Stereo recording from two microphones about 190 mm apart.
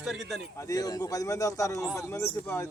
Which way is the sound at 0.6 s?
20° left (ahead or behind).